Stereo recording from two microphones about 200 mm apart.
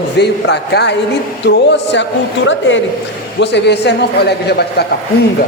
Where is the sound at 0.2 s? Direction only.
55° left (ahead or behind).